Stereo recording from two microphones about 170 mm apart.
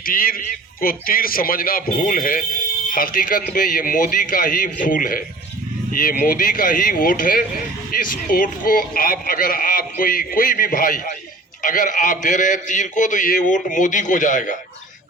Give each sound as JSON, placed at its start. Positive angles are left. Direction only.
{"t": 0.0, "sound": "a man's voice", "side_deg": 55}